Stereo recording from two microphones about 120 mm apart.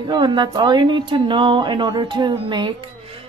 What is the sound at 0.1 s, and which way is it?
A woman's voice, 40° right (ahead or behind).